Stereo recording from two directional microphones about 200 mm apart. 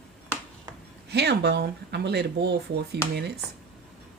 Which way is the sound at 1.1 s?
55° right (ahead or behind).